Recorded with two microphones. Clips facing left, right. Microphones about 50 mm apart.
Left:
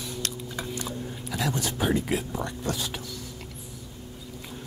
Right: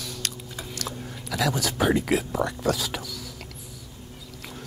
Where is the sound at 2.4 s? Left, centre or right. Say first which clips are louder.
Right 6 dB; right.